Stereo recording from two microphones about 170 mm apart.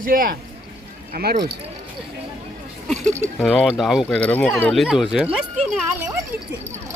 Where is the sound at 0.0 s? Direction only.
55° right (ahead or behind).